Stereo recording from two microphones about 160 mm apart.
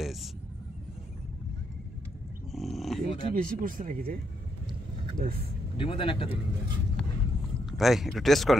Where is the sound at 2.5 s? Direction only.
Centre (ahead or behind).